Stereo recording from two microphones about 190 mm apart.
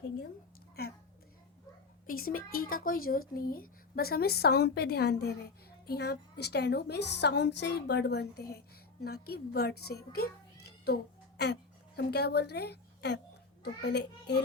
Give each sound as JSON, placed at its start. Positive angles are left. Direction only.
{"t": 2.0, "sound": "a woman's voice", "side_deg": 50}